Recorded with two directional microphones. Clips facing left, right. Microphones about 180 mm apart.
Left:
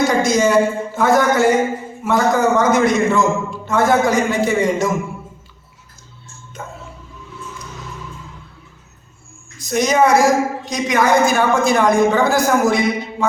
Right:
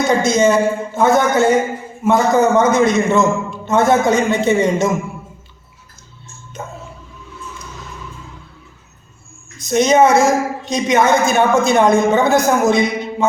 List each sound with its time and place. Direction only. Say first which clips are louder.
0.2 s a woman's voice: right 1 dB; 20° right (ahead or behind)
9.6 s a woman's voice: right 3 dB; 25° right (ahead or behind)